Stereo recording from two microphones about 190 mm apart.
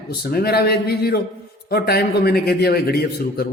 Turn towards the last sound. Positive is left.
turn(degrees=55)  # may be behind; listen again after turning